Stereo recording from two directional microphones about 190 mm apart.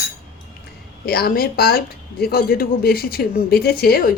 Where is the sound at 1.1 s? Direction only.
50° left (ahead or behind).